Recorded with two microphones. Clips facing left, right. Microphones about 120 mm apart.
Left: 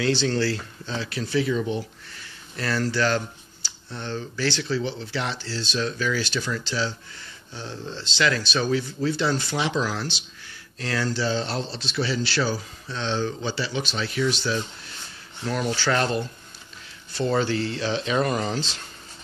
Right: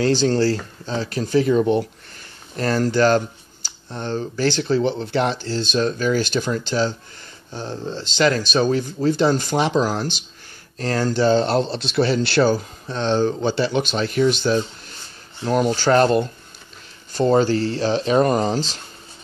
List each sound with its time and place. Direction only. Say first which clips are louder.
0.0 s speech: right 6 dB; 40° right (ahead or behind)
2.1 s speech: right 7 dB; 45° right (ahead or behind)